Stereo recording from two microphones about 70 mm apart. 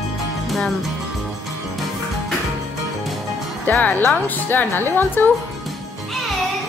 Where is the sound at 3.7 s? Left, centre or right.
Left.